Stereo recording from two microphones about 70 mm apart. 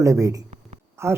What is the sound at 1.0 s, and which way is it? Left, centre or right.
Speech, right.